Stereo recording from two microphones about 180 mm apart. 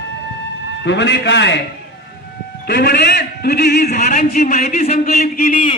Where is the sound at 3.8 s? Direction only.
45° left (ahead or behind).